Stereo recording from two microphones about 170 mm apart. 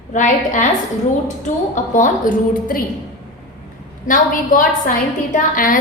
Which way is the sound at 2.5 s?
55° left (ahead or behind).